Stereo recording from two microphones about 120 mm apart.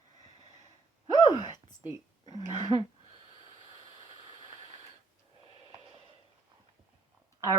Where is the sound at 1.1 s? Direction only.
35° left (ahead or behind).